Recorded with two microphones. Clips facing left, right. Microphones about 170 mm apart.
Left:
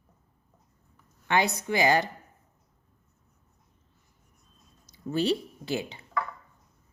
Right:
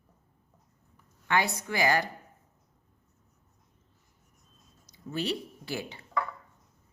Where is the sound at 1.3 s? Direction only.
20° left (ahead or behind).